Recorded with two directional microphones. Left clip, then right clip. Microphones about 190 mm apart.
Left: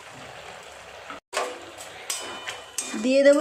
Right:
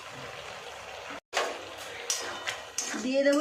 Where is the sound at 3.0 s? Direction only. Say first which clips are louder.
Left 8 dB; 50° left (ahead or behind).